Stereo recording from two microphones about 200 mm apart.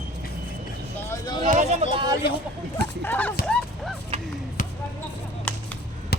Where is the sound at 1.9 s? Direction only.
20° right (ahead or behind).